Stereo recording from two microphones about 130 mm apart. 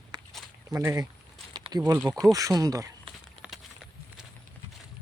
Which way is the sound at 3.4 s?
5° right (ahead or behind).